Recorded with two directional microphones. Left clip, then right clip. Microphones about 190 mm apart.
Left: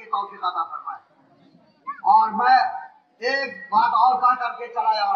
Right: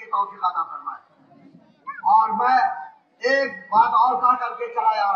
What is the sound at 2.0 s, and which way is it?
A man's voice, 40° right (ahead or behind).